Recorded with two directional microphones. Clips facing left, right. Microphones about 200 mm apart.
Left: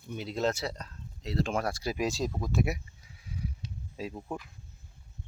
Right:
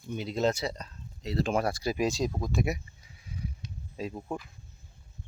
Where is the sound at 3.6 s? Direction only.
35° left (ahead or behind).